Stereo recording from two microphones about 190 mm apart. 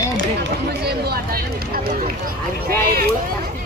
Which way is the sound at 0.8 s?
55° right (ahead or behind).